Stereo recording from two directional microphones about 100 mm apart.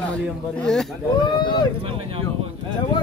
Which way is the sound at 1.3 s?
50° left (ahead or behind).